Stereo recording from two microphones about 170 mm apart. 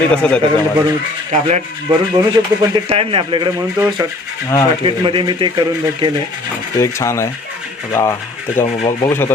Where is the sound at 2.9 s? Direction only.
30° right (ahead or behind).